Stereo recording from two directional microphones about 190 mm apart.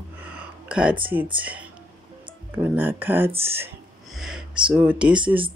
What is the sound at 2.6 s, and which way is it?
Speech, 10° right (ahead or behind).